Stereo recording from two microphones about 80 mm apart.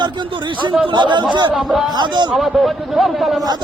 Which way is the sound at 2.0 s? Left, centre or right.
Right.